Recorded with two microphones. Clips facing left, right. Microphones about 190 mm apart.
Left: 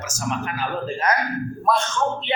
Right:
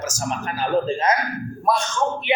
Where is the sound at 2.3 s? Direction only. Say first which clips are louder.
Right 3 dB; 10° right (ahead or behind).